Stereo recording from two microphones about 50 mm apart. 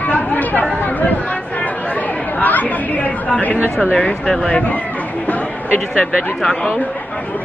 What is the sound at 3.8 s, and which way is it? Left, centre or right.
Speech, left.